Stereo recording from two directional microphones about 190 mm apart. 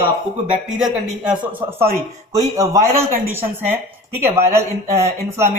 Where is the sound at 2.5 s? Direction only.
15° right (ahead or behind).